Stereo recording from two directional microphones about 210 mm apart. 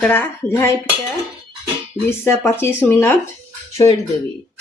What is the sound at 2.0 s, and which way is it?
Speech, 10° left (ahead or behind).